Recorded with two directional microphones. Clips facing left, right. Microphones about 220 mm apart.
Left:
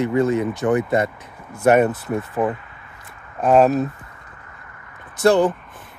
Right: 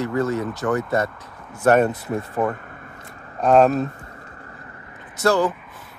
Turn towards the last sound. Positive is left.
turn(degrees=15)  # may be behind; listen again after turning